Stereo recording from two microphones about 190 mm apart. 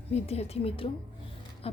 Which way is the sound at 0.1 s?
35° left (ahead or behind).